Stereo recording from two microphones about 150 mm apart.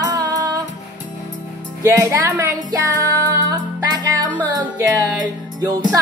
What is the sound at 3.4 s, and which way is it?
Music, 25° right (ahead or behind).